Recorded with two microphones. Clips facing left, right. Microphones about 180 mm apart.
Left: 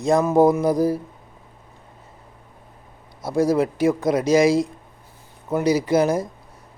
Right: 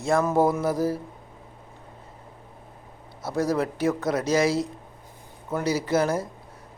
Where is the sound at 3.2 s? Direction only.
10° left (ahead or behind).